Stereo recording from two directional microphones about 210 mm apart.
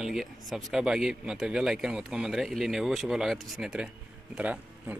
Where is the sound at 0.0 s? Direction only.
Centre (ahead or behind).